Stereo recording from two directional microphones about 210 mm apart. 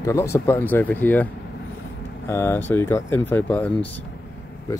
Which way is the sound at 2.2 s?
10° left (ahead or behind).